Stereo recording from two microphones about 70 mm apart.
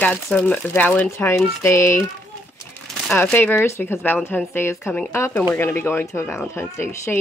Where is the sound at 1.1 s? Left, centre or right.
Left.